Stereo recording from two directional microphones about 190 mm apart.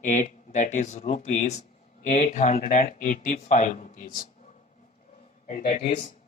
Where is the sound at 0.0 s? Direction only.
40° left (ahead or behind).